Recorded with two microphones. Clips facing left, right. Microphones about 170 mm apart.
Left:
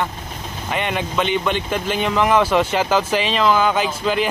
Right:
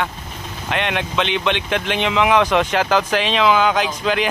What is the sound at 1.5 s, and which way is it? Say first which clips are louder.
Speech: even; 70° right (ahead or behind).